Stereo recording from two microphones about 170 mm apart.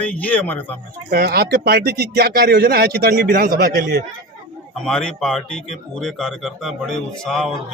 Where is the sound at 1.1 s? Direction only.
70° right (ahead or behind).